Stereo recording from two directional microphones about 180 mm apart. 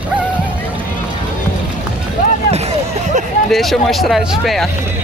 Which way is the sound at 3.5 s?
Centre (ahead or behind).